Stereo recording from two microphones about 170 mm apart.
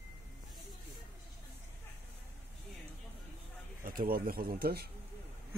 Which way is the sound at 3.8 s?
60° right (ahead or behind).